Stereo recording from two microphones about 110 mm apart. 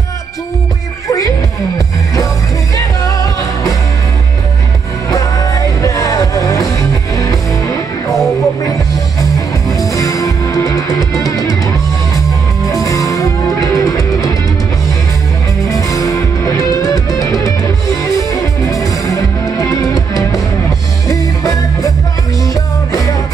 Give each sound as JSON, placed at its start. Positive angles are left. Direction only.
{"t": 2.7, "sound": "music", "side_deg": 30}
{"t": 5.1, "sound": "music", "side_deg": 30}
{"t": 9.9, "sound": "music", "side_deg": 30}
{"t": 12.8, "sound": "music", "side_deg": 30}
{"t": 13.5, "sound": "music", "side_deg": 0}
{"t": 13.8, "sound": "music", "side_deg": 30}
{"t": 15.9, "sound": "music", "side_deg": 30}